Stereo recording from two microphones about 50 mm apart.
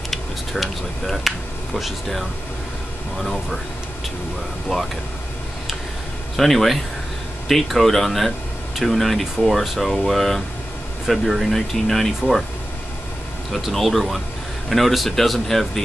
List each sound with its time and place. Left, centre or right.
0.1 s a sound: centre
1.0 s speech: centre
6.3 s speech: centre
13.6 s speech: centre